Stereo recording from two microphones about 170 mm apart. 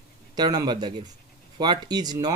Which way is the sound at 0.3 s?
25° right (ahead or behind).